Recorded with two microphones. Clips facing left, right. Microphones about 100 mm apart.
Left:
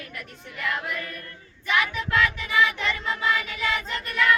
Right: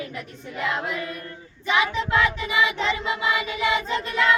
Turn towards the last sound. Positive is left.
turn(degrees=-20)  # may be behind; listen again after turning